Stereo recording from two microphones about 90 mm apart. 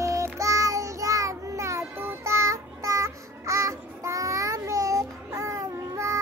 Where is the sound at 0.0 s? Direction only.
35° right (ahead or behind).